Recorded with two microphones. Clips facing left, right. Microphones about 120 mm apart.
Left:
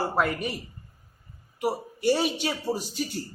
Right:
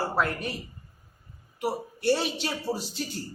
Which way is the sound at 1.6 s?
5° left (ahead or behind).